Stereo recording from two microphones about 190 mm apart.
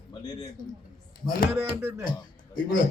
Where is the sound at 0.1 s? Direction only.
20° left (ahead or behind).